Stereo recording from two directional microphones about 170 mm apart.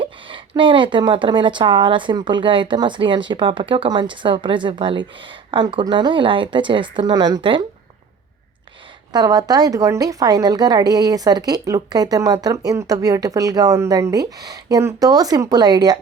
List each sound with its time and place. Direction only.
0.0 s speech: 30° right (ahead or behind)
9.1 s speech: 20° right (ahead or behind)